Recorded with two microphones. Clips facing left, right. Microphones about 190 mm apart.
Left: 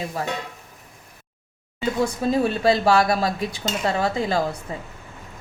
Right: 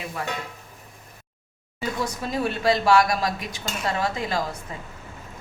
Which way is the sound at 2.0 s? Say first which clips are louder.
Left 5 dB; 30° left (ahead or behind).